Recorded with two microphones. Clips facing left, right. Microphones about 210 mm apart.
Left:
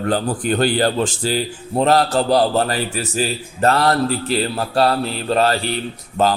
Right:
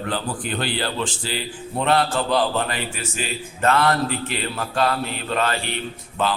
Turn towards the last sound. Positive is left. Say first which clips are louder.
# left 6 dB
turn(degrees=40)  # may be behind; listen again after turning